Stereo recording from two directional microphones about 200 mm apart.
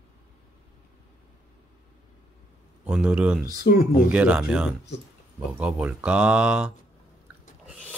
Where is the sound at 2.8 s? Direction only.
5° right (ahead or behind).